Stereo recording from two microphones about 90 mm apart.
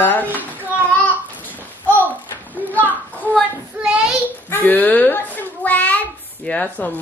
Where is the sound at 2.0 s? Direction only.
20° right (ahead or behind).